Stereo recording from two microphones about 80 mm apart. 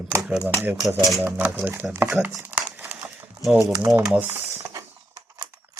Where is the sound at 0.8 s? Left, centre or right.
Right.